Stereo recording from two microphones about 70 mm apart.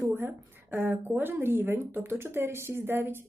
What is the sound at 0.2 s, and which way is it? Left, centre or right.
Speech, right.